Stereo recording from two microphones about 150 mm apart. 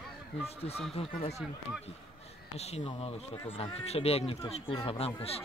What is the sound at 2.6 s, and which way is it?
Speech, 45° left (ahead or behind).